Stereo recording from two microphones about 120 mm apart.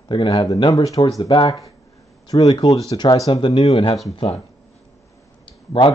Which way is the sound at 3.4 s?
55° left (ahead or behind).